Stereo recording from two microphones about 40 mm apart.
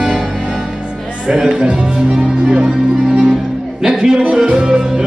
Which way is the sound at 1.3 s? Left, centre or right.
Centre.